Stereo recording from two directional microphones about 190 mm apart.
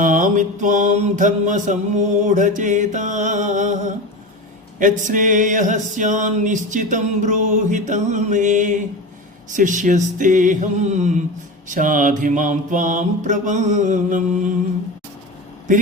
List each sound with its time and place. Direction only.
0.0 s mantra: 45° right (ahead or behind)